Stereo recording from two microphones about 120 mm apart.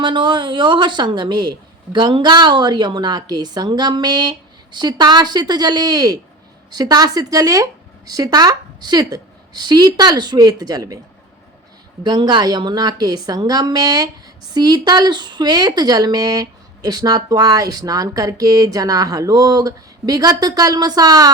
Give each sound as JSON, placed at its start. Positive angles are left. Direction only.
{"t": 0.0, "sound": "speech", "side_deg": -40}
{"t": 12.0, "sound": "speech", "side_deg": -35}